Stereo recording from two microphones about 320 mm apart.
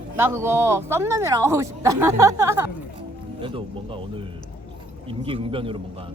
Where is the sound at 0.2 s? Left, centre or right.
Centre.